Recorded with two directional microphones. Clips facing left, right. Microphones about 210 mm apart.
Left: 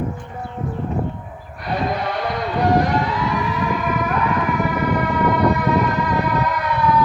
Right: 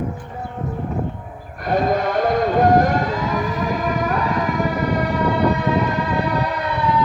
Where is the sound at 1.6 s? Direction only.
45° right (ahead or behind).